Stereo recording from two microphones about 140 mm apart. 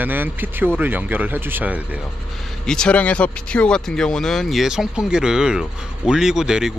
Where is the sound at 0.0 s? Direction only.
15° right (ahead or behind).